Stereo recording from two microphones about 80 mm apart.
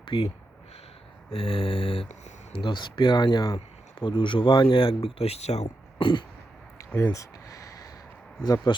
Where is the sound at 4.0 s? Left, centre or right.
Left.